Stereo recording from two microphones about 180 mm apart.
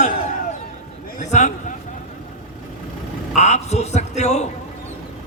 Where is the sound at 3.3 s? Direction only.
40° left (ahead or behind).